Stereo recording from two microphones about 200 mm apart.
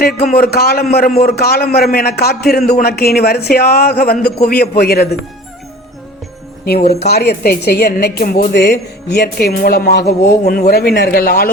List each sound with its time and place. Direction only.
0.3 s speech: 50° left (ahead or behind)
7.0 s speech: 55° left (ahead or behind)
9.0 s speech: 55° left (ahead or behind)